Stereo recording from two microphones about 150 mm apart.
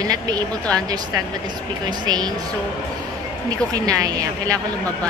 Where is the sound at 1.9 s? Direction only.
25° right (ahead or behind).